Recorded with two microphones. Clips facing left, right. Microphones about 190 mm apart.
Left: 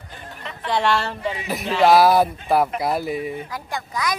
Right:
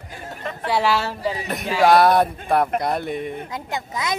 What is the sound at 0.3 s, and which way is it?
Chatter, 45° right (ahead or behind).